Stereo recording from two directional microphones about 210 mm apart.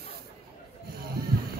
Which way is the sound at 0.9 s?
50° right (ahead or behind).